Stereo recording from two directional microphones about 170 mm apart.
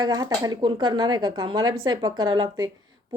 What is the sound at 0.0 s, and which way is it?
Speech, 20° right (ahead or behind).